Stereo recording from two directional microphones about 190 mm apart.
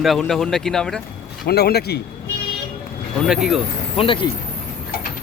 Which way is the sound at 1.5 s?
55° left (ahead or behind).